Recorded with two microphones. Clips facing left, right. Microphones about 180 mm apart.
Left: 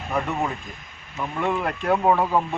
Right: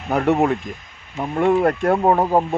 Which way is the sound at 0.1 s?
75° right (ahead or behind).